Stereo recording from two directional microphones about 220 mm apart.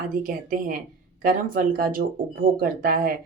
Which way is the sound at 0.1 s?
40° right (ahead or behind).